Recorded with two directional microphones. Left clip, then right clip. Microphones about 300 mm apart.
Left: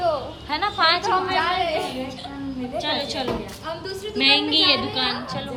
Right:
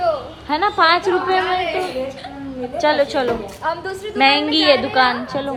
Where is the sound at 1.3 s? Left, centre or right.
Centre.